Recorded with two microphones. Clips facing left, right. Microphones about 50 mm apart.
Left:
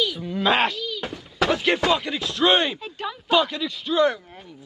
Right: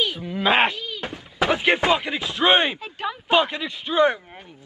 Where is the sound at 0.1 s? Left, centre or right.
Centre.